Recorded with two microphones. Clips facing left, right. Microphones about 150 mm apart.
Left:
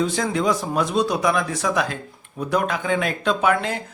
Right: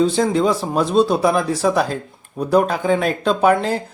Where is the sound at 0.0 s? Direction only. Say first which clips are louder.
Right 5 dB; 30° right (ahead or behind).